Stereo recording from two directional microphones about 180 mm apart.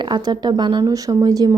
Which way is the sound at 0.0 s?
25° right (ahead or behind).